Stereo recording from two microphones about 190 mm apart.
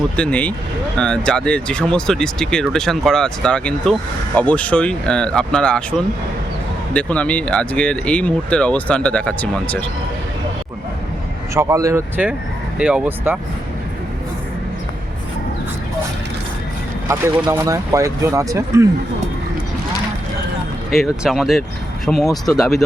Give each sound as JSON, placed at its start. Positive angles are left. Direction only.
{"t": 0.2, "sound": "speech", "side_deg": 5}
{"t": 11.5, "sound": "speech", "side_deg": -15}
{"t": 17.1, "sound": "speech", "side_deg": -15}
{"t": 20.9, "sound": "speech", "side_deg": 0}